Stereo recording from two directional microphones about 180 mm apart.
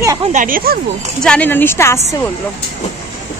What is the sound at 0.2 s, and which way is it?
Speech, 45° right (ahead or behind).